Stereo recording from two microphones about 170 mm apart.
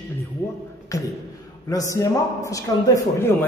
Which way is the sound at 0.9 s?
20° left (ahead or behind).